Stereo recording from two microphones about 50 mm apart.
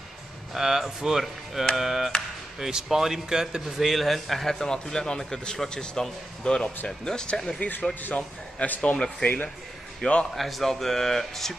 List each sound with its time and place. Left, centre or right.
0.6 s speech: centre
8.0 s a man's voice: left
9.2 s a man's voice: left
10.3 s speech: centre